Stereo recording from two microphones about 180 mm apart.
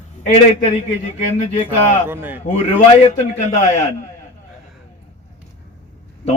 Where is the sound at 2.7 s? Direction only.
40° left (ahead or behind).